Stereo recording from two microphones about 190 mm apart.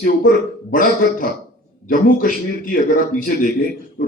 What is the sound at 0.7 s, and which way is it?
A man's voice, 45° left (ahead or behind).